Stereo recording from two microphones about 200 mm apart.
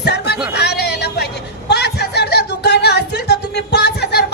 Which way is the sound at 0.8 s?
55° left (ahead or behind).